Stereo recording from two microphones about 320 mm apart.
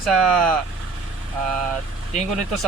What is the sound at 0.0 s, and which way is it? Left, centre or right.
Speech, centre.